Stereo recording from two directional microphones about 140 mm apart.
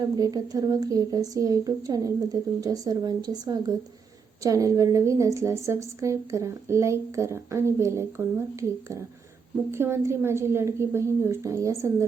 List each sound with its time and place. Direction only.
0.2 s a woman's voice: 25° right (ahead or behind)